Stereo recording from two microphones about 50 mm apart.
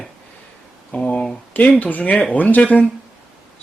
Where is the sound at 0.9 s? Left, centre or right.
Left.